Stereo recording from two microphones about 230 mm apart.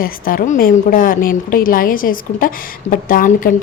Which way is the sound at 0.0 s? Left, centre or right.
Left.